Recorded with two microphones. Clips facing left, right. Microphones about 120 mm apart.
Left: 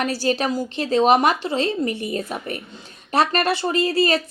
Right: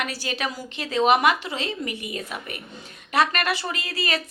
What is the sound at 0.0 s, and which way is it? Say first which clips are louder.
Speech: left 7 dB; 35° left (ahead or behind).